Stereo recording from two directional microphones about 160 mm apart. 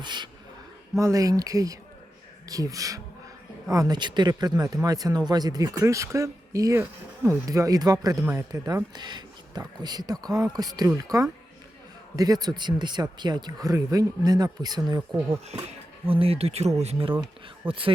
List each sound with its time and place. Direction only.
0.0 s speech: 30° right (ahead or behind)
15.6 s speech: 35° right (ahead or behind)